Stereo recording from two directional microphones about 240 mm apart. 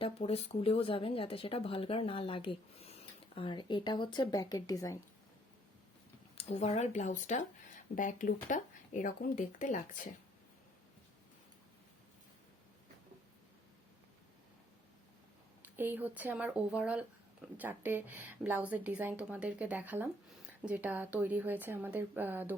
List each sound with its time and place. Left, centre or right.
0.0 s speech: left
6.3 s speech: left
15.6 s speech: centre